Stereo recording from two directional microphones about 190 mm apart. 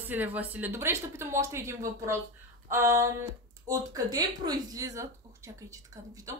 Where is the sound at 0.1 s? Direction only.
10° right (ahead or behind).